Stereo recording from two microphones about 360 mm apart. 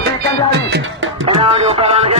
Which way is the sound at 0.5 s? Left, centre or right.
Right.